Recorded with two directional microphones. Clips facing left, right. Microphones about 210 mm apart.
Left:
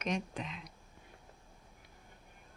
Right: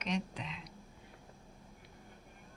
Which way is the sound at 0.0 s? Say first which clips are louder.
Left 1 dB; 50° left (ahead or behind).